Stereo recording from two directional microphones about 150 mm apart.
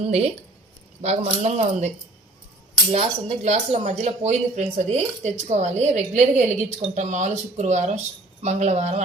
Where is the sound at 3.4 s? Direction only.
45° right (ahead or behind).